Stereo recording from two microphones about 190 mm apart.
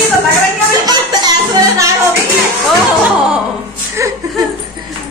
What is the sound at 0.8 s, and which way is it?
Music, 20° right (ahead or behind).